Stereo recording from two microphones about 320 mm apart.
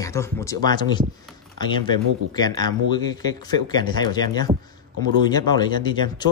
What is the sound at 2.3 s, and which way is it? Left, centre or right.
Speech, centre.